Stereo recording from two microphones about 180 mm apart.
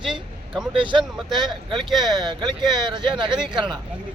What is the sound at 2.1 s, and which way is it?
Speech, 25° right (ahead or behind).